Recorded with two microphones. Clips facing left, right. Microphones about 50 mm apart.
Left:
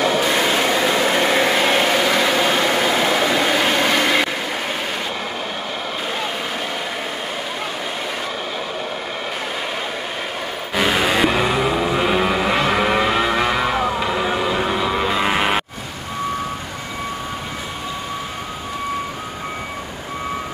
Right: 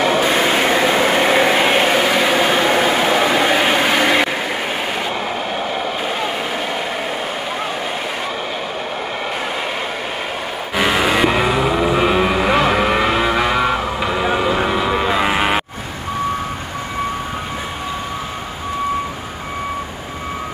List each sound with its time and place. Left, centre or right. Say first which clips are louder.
0.0 s vehicle: right 2 dB; right
11.0 s vehicle: right 2 dB; centre
11.4 s vehicle: right 2 dB; right
14.7 s vehicle: right 2 dB; right
15.1 s a sound: right 2 dB; centre